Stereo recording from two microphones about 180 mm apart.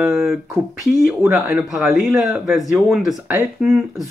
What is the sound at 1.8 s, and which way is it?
Speech, centre (ahead or behind).